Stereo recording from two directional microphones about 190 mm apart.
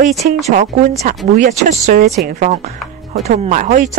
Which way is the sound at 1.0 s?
45° right (ahead or behind).